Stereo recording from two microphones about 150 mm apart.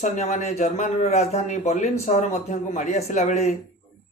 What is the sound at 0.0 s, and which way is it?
A man's voice, 50° left (ahead or behind).